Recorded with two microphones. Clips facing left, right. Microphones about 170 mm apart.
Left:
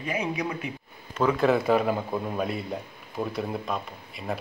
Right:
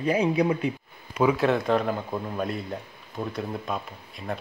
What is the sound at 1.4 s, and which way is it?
A man's voice, 5° left (ahead or behind).